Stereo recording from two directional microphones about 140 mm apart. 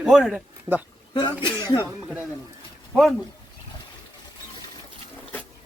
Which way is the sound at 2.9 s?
Centre (ahead or behind).